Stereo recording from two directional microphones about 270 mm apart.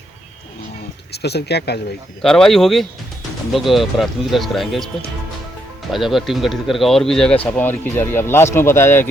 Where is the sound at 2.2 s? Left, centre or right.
Centre.